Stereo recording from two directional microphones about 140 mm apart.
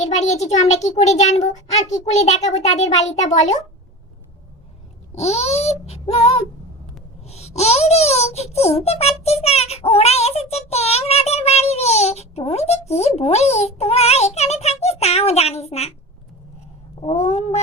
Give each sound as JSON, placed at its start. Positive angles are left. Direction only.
{"t": 0.0, "sound": "a child's voice", "side_deg": 55}
{"t": 5.1, "sound": "a child's voice", "side_deg": 50}
{"t": 17.2, "sound": "a child's voice", "side_deg": 50}